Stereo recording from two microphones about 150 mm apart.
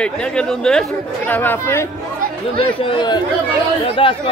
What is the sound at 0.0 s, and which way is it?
Speech, 5° left (ahead or behind).